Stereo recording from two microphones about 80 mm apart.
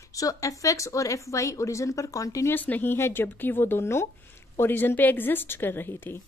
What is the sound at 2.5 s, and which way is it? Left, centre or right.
A woman's voice, left.